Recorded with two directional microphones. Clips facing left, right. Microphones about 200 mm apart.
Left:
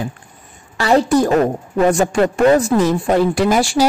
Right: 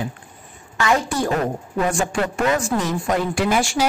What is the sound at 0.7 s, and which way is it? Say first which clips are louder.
A woman's voice: left 7 dB; 35° left (ahead or behind).